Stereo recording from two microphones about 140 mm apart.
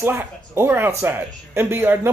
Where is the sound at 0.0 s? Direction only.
15° right (ahead or behind).